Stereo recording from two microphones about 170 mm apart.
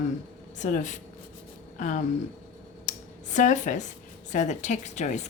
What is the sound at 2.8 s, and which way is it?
Speech, 45° left (ahead or behind).